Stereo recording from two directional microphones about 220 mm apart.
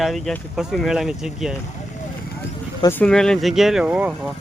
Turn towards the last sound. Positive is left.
turn(degrees=-5)  # may be behind; listen again after turning